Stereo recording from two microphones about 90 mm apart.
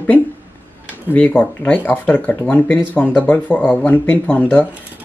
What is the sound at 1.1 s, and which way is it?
Speech, 15° left (ahead or behind).